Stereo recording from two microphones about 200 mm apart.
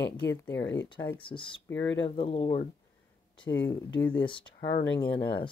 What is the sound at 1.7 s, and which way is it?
Speech, 65° left (ahead or behind).